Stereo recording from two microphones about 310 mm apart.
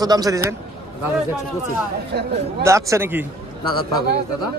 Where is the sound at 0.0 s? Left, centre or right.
Centre.